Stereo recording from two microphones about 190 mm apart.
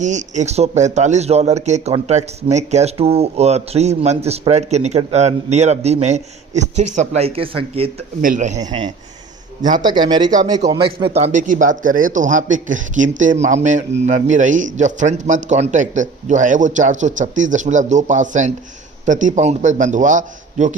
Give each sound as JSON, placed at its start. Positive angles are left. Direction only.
{"t": 0.0, "sound": "speech", "side_deg": -40}
{"t": 8.2, "sound": "speech", "side_deg": -40}
{"t": 9.8, "sound": "speech", "side_deg": -25}